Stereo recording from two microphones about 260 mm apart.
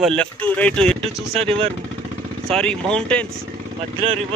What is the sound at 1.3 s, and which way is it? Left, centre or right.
Speech, right.